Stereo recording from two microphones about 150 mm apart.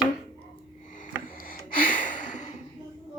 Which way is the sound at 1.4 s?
70° left (ahead or behind).